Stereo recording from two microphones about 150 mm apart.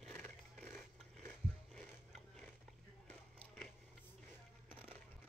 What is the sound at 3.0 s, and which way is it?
Biting, 5° left (ahead or behind).